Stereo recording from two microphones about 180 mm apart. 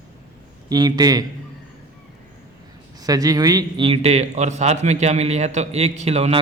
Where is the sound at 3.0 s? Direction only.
20° right (ahead or behind).